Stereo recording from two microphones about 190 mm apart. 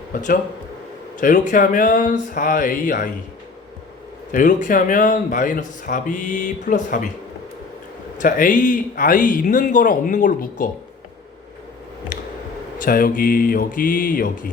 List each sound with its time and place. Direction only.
0.1 s a man's voice: 40° left (ahead or behind)
4.3 s a man's voice: 45° left (ahead or behind)
8.2 s a man's voice: 45° left (ahead or behind)
12.8 s a man's voice: 50° left (ahead or behind)